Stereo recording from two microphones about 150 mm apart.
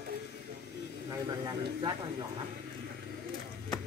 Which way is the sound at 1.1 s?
30° right (ahead or behind).